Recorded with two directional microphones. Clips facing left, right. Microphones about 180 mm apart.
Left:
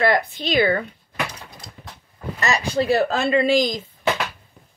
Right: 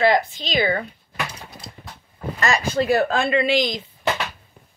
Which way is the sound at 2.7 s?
30° left (ahead or behind).